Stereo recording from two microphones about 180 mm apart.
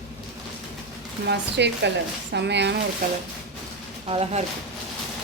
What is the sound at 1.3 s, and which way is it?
Speech, 70° right (ahead or behind).